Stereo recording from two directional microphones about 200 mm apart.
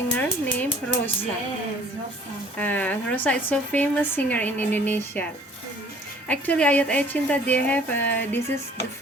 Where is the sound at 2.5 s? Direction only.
10° left (ahead or behind).